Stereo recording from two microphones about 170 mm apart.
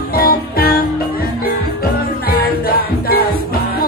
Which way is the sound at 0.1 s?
65° left (ahead or behind).